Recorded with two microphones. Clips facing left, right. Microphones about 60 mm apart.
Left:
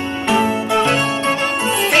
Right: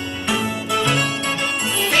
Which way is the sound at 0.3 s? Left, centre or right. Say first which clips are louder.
Left 6 dB; left.